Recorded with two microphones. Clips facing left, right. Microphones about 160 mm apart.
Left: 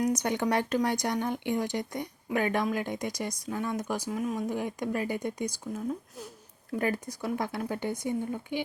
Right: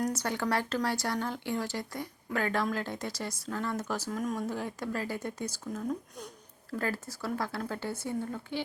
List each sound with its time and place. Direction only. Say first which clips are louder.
0.0 s speech: left 4 dB; 15° left (ahead or behind)